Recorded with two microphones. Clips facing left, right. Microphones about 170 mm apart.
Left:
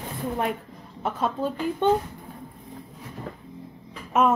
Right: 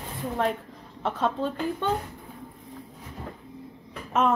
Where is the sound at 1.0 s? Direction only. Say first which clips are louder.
Even; 10° left (ahead or behind).